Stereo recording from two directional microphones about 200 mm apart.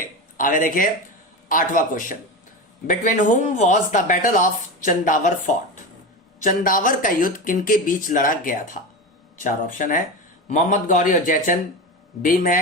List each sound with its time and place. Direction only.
0.3 s speech: 40° left (ahead or behind)
6.4 s speech: 45° left (ahead or behind)